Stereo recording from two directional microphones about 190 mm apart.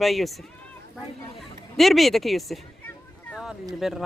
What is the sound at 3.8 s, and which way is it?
Speech, centre (ahead or behind).